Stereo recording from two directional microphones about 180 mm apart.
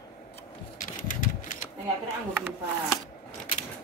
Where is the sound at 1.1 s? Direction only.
45° left (ahead or behind).